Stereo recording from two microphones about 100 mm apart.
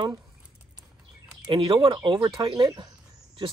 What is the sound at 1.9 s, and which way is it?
Speech, 55° right (ahead or behind).